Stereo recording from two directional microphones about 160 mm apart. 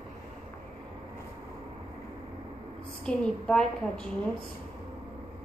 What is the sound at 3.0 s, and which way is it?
A woman's voice, 5° left (ahead or behind).